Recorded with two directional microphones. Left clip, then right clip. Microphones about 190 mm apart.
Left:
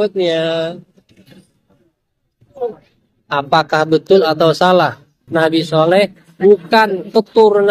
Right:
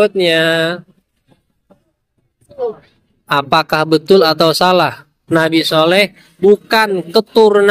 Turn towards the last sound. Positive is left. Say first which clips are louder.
# right 1 dB
turn(degrees=-85)